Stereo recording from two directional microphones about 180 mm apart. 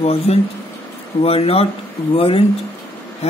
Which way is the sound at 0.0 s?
35° left (ahead or behind).